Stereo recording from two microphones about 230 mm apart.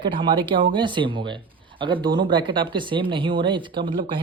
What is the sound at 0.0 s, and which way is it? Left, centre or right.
Speech, right.